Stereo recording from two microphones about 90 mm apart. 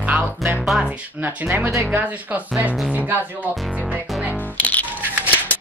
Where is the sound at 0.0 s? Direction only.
15° right (ahead or behind).